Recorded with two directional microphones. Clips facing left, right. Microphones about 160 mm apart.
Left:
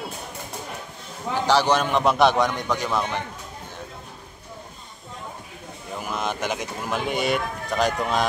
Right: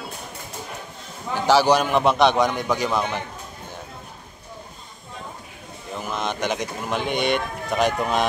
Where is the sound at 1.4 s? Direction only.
5° right (ahead or behind).